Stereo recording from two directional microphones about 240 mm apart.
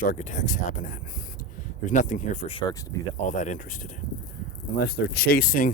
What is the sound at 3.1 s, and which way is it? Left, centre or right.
Speech, left.